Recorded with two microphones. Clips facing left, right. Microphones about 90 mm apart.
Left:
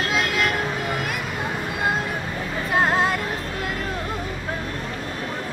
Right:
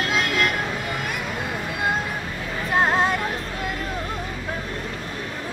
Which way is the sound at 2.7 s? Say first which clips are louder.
Even; centre (ahead or behind).